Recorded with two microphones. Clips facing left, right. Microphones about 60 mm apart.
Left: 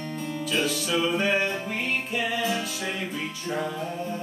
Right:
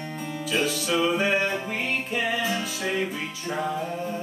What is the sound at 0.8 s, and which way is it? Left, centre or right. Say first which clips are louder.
Music: right 2 dB; centre.